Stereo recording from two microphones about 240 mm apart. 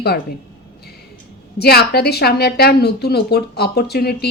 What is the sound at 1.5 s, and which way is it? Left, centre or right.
A woman's voice, left.